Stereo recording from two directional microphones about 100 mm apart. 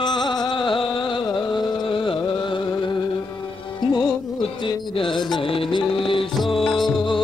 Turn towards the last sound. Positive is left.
turn(degrees=0)  # may be behind; listen again after turning